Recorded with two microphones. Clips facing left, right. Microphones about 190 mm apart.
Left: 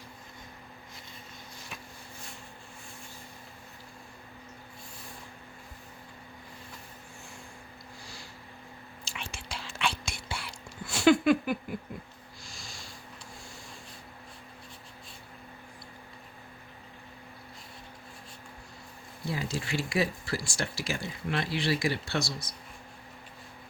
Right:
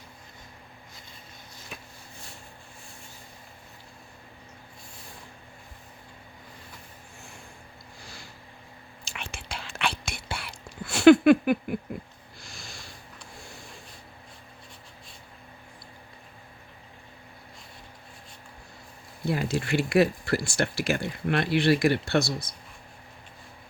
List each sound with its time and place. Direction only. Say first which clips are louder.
9.0 s whispering: right 2 dB; 60° right (ahead or behind)
11.9 s speech: right 5 dB; 60° right (ahead or behind)
12.4 s snort: right 3 dB; 60° right (ahead or behind)
19.2 s speech: right 6 dB; 60° right (ahead or behind)